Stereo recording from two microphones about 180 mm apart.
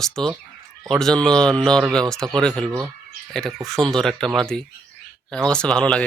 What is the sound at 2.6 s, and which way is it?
Speech, 15° right (ahead or behind).